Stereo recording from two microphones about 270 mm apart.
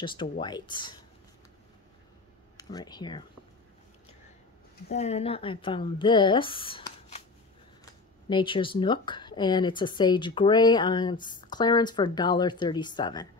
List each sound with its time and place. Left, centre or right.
0.0 s speech: centre
2.5 s speech: centre
4.8 s a woman's voice: left